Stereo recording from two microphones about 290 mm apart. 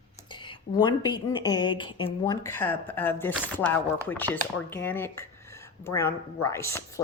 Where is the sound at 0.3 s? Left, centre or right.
Centre.